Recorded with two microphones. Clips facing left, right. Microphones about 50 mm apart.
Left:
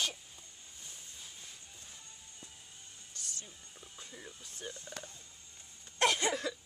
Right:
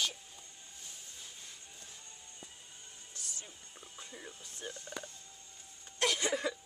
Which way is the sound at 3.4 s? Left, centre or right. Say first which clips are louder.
Right 1 dB; centre.